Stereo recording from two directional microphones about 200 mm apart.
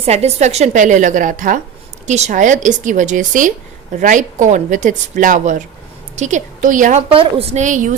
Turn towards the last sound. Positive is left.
turn(degrees=-40)  # may be behind; listen again after turning